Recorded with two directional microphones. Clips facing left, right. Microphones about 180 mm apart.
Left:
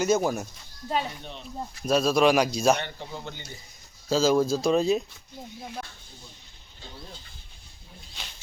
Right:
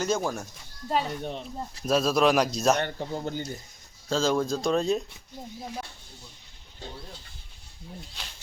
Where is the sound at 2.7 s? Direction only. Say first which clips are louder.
Right 5 dB; 45° right (ahead or behind).